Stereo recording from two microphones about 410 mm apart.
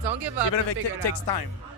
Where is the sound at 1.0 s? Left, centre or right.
Left.